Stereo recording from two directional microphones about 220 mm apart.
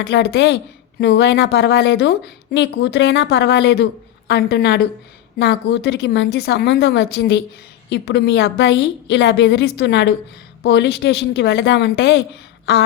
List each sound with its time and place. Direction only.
0.0 s a woman's voice: 50° left (ahead or behind)